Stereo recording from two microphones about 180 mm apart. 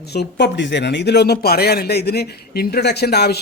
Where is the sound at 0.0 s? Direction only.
65° left (ahead or behind).